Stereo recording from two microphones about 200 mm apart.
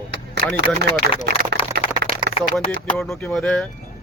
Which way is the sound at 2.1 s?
45° right (ahead or behind).